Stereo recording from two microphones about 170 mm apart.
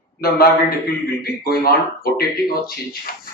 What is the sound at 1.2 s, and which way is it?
Speech, 65° left (ahead or behind).